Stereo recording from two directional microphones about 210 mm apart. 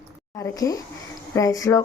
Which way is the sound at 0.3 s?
15° left (ahead or behind).